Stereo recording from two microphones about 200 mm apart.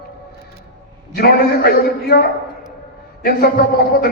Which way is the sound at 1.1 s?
50° left (ahead or behind).